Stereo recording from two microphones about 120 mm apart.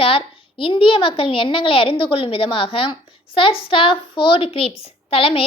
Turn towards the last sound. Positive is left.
turn(degrees=50)  # may be behind; listen again after turning